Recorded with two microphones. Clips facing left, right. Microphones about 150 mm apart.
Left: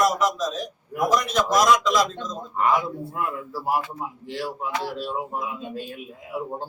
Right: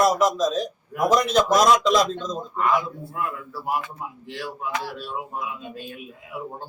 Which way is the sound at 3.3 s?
30° left (ahead or behind).